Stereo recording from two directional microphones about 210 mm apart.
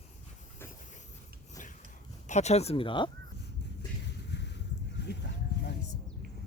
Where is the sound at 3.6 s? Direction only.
55° left (ahead or behind).